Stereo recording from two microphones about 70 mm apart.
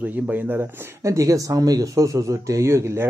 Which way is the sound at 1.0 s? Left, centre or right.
Right.